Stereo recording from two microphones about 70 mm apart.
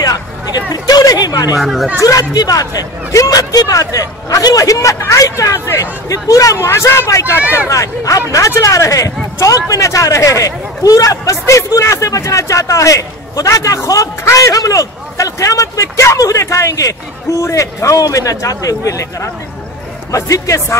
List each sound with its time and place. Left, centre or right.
0.0 s a sound: left
1.6 s speech: centre
2.0 s speech: left